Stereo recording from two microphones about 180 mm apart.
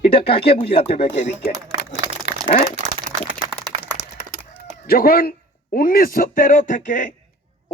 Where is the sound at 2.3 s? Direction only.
50° left (ahead or behind).